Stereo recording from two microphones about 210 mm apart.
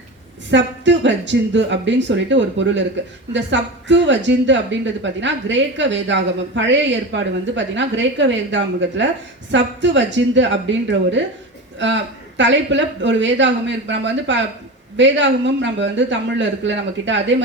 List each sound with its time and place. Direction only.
0.5 s a woman's voice: 60° right (ahead or behind)